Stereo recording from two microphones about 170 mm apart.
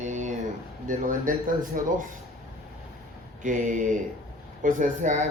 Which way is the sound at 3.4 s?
50° right (ahead or behind).